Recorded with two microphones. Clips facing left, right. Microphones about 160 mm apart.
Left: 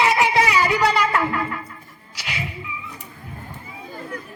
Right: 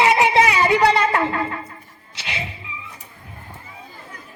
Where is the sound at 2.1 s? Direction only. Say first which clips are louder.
Even; 25° right (ahead or behind).